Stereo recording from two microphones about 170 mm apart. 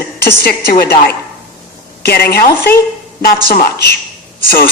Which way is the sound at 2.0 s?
65° left (ahead or behind).